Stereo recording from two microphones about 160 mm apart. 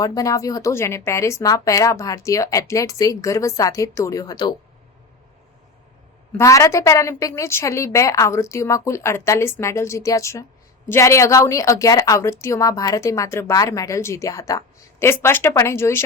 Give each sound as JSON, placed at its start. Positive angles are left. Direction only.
{"t": 0.0, "sound": "a woman's voice", "side_deg": 20}
{"t": 6.3, "sound": "a woman's voice", "side_deg": 20}